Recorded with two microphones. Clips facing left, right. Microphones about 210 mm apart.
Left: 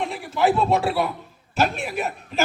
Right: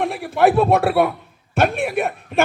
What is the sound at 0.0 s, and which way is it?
A man's voice, 55° right (ahead or behind).